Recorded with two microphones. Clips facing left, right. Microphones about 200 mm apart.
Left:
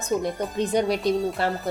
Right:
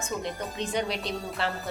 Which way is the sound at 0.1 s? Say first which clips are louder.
Left 9 dB; 40° left (ahead or behind).